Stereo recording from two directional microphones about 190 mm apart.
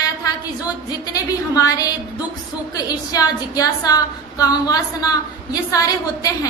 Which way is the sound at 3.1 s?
20° left (ahead or behind).